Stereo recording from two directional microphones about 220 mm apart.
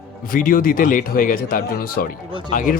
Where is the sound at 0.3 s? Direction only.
40° left (ahead or behind).